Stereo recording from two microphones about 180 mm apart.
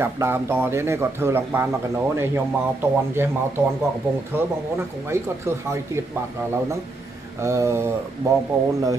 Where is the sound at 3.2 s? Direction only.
15° right (ahead or behind).